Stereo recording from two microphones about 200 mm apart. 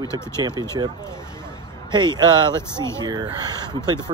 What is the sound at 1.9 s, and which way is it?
Speech, 20° right (ahead or behind).